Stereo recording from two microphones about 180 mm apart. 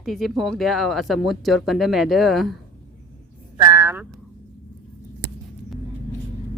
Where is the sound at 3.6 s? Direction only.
20° right (ahead or behind).